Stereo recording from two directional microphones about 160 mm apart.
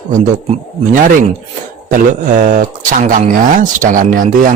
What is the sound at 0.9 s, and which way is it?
A man's voice, 55° right (ahead or behind).